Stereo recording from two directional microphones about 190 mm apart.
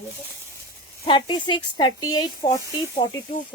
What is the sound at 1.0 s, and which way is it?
Speech, 25° left (ahead or behind).